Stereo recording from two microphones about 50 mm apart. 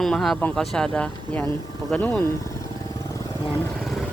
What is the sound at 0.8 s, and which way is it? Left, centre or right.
Speech, centre.